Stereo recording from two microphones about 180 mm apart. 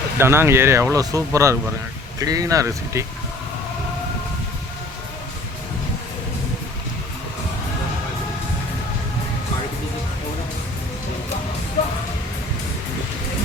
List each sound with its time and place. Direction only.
0.2 s speech: 15° right (ahead or behind)